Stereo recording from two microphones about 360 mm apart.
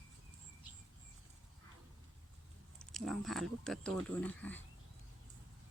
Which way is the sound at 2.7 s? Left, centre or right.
Centre.